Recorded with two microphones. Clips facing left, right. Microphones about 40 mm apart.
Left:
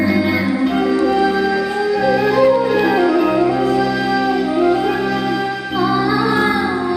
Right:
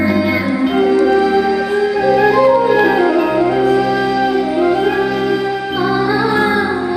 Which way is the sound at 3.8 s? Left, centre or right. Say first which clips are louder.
Right 2 dB; right.